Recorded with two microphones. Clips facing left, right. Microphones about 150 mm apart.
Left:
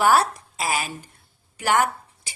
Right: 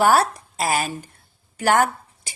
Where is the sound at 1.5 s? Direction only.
40° right (ahead or behind).